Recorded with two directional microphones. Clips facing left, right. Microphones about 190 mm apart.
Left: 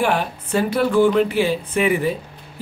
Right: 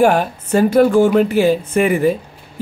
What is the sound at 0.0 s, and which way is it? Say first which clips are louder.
Speech: right 7 dB; 45° right (ahead or behind).